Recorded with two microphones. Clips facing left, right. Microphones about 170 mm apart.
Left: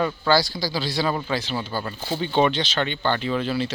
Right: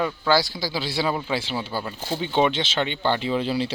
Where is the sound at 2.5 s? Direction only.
20° right (ahead or behind).